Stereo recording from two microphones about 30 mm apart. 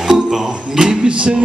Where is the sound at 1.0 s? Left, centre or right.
Right.